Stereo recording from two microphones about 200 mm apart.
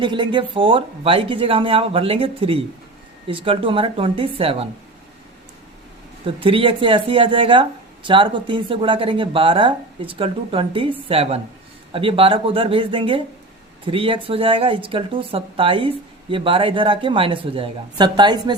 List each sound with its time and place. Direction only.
0.0 s speech: 25° right (ahead or behind)
6.2 s speech: 25° right (ahead or behind)